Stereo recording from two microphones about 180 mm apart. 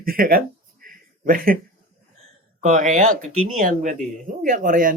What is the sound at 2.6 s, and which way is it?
Speech, 45° right (ahead or behind).